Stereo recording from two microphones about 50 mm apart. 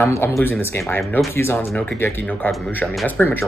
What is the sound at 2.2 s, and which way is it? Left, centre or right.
Speech, left.